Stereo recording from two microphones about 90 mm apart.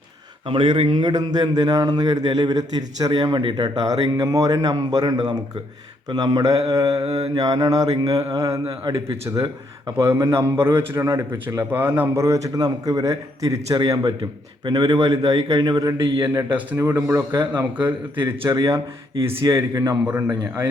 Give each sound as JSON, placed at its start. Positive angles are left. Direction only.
{"t": 0.4, "sound": "a man's voice", "side_deg": -70}
{"t": 10.0, "sound": "speech", "side_deg": -40}
{"t": 10.5, "sound": "a man's voice", "side_deg": -25}
{"t": 11.7, "sound": "a man's voice", "side_deg": -25}
{"t": 17.3, "sound": "a man's voice", "side_deg": -55}